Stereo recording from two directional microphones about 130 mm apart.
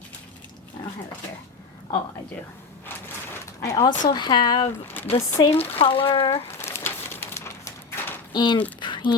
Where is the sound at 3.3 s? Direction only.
25° left (ahead or behind).